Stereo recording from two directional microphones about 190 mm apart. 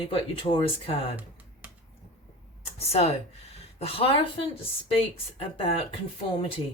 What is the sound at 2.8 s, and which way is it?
A woman's voice, 35° left (ahead or behind).